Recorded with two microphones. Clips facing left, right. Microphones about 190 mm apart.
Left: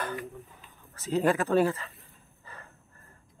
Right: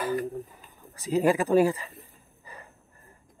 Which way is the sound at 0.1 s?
40° right (ahead or behind).